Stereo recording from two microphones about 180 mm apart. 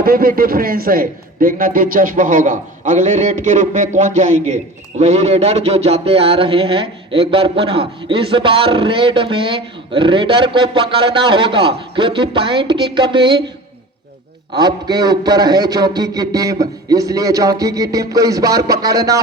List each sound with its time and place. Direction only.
0.0 s a man's voice: 55° right (ahead or behind); by 13.4 s 25° right (ahead or behind)
14.5 s speech: 20° right (ahead or behind)